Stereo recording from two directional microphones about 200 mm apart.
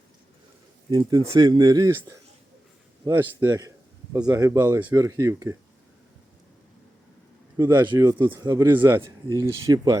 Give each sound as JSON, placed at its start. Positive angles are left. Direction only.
{"t": 0.9, "sound": "a man's voice", "side_deg": -20}
{"t": 7.5, "sound": "a man's voice", "side_deg": -15}